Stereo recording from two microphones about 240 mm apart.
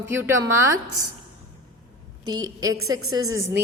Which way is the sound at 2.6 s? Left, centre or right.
Right.